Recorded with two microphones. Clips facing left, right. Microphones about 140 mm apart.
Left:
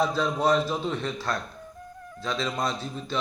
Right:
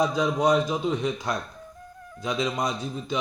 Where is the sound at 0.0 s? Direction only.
15° right (ahead or behind).